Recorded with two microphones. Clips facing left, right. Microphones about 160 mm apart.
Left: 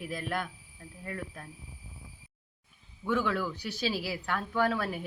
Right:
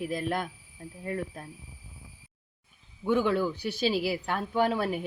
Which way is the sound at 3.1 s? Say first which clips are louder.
Right 5 dB; 25° right (ahead or behind).